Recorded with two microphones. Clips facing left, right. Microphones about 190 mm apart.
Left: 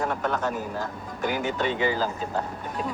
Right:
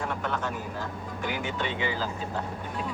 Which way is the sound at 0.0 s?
40° left (ahead or behind).